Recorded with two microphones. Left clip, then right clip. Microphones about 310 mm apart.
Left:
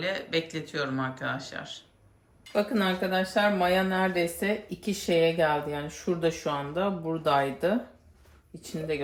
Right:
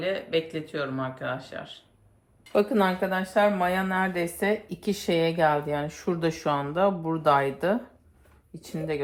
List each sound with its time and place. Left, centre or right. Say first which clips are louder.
0.0 s speech: right 2 dB; centre
2.5 s speech: right 4 dB; centre